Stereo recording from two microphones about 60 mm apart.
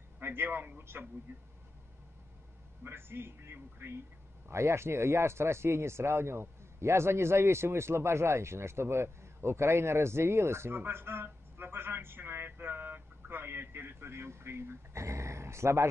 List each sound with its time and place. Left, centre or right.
0.2 s a man's voice: right
2.8 s speech: right